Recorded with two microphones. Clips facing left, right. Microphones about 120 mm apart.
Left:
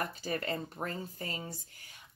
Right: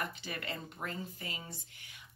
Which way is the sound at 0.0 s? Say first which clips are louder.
Left 5 dB; 40° left (ahead or behind).